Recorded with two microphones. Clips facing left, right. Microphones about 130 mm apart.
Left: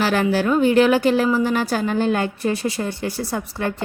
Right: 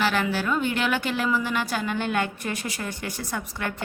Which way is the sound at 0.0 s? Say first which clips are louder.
Left 6 dB; 40° left (ahead or behind).